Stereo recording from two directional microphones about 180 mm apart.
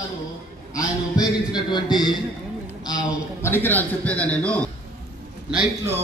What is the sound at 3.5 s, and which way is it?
A man's voice, 10° left (ahead or behind).